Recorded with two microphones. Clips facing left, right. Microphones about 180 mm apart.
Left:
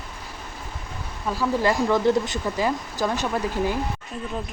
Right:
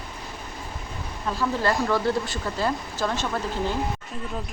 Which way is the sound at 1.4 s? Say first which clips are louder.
Left 3 dB; 15° left (ahead or behind).